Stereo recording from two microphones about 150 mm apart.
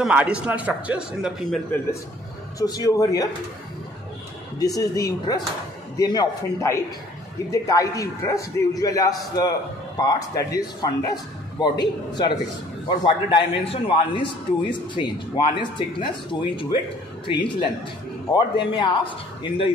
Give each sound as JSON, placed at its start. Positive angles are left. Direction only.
{"t": 0.0, "sound": "a man's voice", "side_deg": -10}
{"t": 2.6, "sound": "a man's voice", "side_deg": 25}
{"t": 4.6, "sound": "a man's voice", "side_deg": 25}